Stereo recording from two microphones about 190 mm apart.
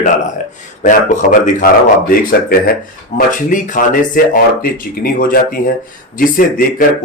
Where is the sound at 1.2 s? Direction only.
45° left (ahead or behind).